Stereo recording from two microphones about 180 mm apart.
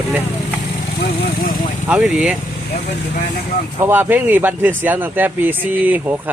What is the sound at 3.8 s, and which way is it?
Speech, 10° right (ahead or behind).